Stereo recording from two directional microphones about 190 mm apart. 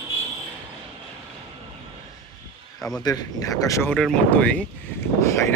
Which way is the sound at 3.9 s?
5° left (ahead or behind).